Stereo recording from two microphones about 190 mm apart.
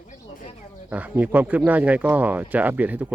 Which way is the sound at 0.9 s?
10° right (ahead or behind).